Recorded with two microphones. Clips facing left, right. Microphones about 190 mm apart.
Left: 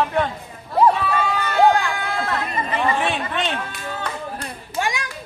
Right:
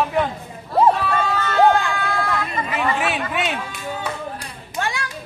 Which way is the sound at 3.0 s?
5° right (ahead or behind).